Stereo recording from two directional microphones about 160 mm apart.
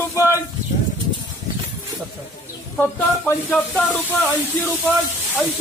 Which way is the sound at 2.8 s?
10° left (ahead or behind).